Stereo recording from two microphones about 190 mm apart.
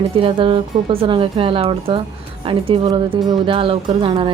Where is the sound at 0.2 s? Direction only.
25° right (ahead or behind).